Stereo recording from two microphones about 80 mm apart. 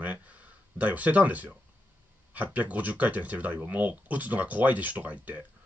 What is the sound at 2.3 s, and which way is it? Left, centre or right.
Speech, right.